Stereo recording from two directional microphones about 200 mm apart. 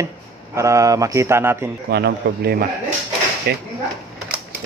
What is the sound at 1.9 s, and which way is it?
A man's voice, 55° right (ahead or behind).